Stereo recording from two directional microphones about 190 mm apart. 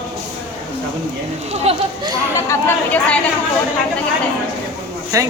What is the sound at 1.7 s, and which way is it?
Speech, 30° right (ahead or behind).